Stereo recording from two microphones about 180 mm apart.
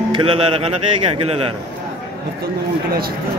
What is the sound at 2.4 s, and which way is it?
Speech, 55° right (ahead or behind).